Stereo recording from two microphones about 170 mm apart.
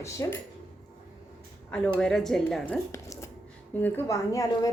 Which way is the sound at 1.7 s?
5° left (ahead or behind).